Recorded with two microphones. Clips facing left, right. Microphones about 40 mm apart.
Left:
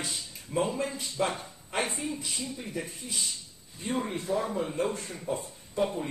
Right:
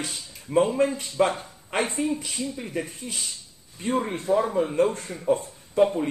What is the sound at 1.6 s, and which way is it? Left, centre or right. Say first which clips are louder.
A woman's voice: right 6 dB; right.